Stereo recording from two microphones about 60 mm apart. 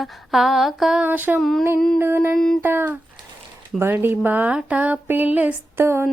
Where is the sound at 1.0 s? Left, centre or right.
Right.